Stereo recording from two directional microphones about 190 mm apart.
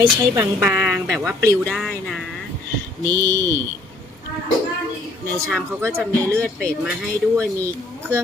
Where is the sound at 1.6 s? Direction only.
Centre (ahead or behind).